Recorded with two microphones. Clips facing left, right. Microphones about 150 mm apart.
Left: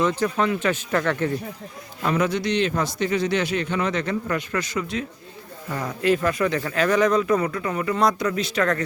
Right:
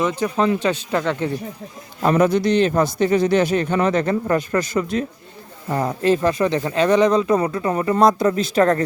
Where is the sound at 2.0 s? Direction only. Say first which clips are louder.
Right 6 dB; 45° right (ahead or behind).